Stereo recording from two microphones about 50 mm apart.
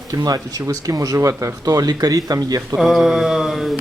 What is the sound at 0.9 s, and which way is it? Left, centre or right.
Speech, right.